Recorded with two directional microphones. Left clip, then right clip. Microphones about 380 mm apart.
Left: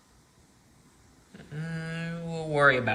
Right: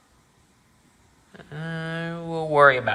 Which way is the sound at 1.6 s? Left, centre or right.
Centre.